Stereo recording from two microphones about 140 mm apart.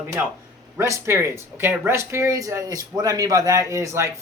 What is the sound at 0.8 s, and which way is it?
Speech, 20° right (ahead or behind).